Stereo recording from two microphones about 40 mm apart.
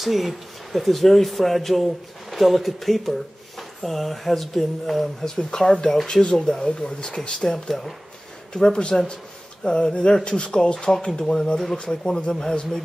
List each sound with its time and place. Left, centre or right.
0.0 s a man's voice: centre; by 7.2 s left
7.4 s speech: centre
8.5 s a man's voice: left